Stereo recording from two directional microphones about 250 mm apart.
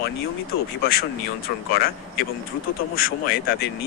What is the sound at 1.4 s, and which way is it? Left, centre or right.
Speech, left.